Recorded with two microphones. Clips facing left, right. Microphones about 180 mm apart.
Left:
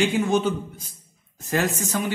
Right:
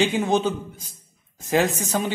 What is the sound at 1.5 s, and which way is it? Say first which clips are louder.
Speech: right 3 dB; 20° right (ahead or behind).